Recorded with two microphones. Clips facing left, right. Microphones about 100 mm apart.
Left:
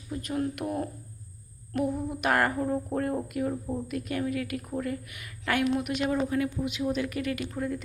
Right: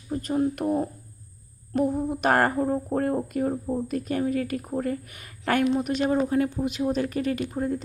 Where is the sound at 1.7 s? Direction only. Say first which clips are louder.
Right 5 dB; 35° right (ahead or behind).